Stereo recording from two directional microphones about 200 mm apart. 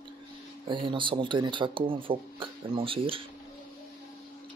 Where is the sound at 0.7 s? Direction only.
25° right (ahead or behind).